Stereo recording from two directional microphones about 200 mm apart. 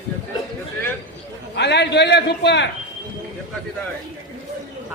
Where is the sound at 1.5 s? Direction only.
60° left (ahead or behind).